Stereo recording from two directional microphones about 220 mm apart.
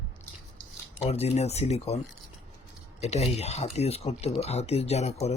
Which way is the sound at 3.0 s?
30° left (ahead or behind).